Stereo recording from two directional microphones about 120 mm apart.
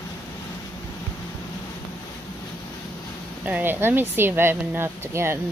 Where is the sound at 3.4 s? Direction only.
15° right (ahead or behind).